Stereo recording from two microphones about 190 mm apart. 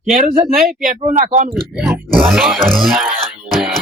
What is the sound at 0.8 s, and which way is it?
Speech, 45° right (ahead or behind).